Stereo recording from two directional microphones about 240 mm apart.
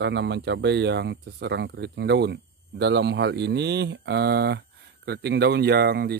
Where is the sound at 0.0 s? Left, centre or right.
Right.